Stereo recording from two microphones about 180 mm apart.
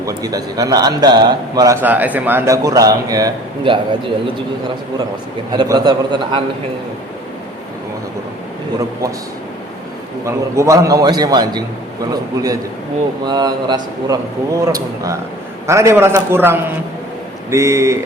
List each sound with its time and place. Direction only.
0.0 s a man's voice: 20° right (ahead or behind)
5.5 s a man's voice: 20° right (ahead or behind)
10.2 s a man's voice: 15° right (ahead or behind)